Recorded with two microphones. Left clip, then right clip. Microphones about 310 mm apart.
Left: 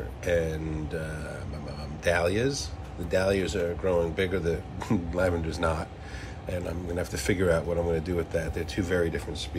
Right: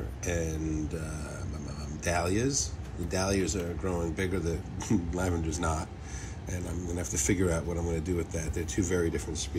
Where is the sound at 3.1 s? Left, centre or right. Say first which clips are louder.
Left 5 dB; centre.